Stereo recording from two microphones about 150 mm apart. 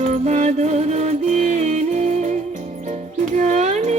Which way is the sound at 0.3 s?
50° right (ahead or behind).